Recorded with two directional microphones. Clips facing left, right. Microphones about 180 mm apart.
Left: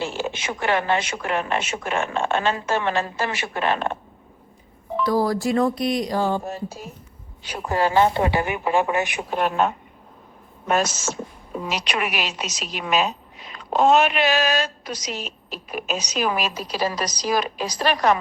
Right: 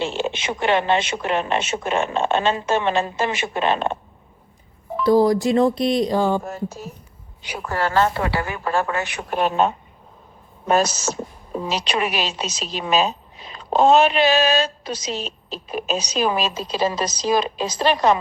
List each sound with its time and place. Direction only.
0.0 s a woman's voice: 25° right (ahead or behind)
5.0 s a woman's voice: 20° right (ahead or behind)
7.6 s speech: 15° left (ahead or behind)
9.3 s a woman's voice: 20° right (ahead or behind)
10.7 s a woman's voice: 35° right (ahead or behind)